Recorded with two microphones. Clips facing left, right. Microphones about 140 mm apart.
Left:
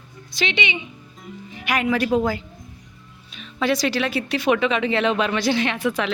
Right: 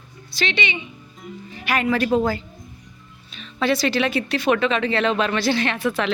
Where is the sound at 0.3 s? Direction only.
15° left (ahead or behind).